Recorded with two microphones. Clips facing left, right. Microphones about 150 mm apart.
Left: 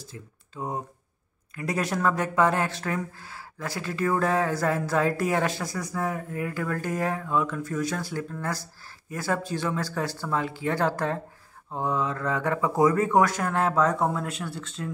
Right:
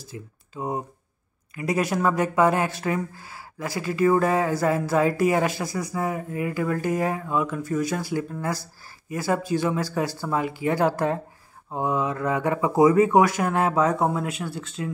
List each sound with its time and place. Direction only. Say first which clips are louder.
0.0 s speech: right 4 dB; 5° right (ahead or behind)